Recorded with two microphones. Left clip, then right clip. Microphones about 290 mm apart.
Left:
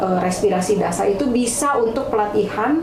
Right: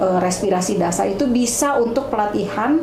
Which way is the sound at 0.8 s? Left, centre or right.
Right.